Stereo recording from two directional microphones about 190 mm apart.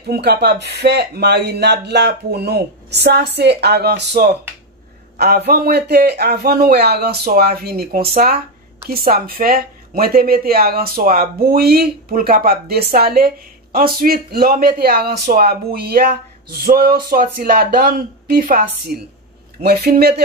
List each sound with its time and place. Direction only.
0.0 s speech: 60° right (ahead or behind)